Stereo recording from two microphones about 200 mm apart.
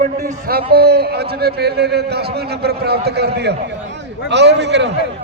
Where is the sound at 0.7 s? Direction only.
55° right (ahead or behind).